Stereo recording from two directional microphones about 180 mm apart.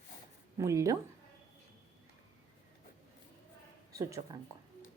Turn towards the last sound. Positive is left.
turn(degrees=-20)  # may be behind; listen again after turning